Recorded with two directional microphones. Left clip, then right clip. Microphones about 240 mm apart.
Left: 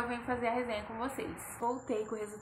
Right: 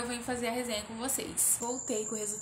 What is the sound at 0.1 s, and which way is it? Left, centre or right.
A woman's voice, centre.